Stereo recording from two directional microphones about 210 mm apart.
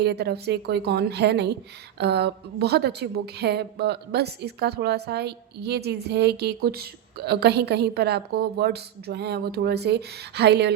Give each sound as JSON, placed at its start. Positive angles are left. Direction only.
{"t": 0.0, "sound": "a woman's voice", "side_deg": -50}